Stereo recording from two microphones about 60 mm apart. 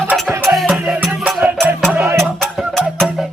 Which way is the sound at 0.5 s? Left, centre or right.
Right.